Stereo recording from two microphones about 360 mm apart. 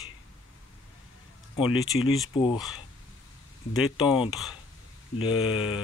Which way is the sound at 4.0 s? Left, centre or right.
Centre.